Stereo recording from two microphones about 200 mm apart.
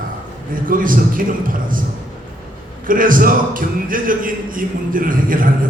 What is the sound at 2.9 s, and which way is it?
A man's voice, 45° right (ahead or behind).